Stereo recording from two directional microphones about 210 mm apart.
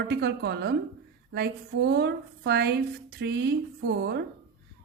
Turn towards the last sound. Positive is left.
turn(degrees=-55)  # may be behind; listen again after turning